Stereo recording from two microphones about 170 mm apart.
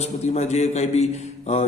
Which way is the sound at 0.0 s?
40° left (ahead or behind).